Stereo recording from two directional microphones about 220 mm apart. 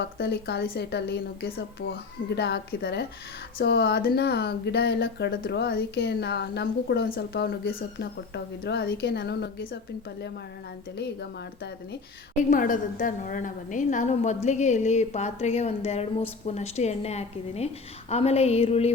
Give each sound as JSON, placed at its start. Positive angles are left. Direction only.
{"t": 0.0, "sound": "speech", "side_deg": 50}
{"t": 10.9, "sound": "speech", "side_deg": 50}
{"t": 12.4, "sound": "a woman's voice", "side_deg": 35}